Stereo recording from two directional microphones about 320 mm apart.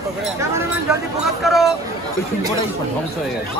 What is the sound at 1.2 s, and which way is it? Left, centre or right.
Speech, centre.